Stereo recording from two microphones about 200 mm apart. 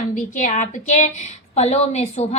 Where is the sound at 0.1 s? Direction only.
40° left (ahead or behind).